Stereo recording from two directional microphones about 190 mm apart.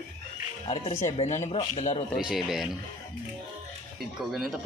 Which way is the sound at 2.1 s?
Centre (ahead or behind).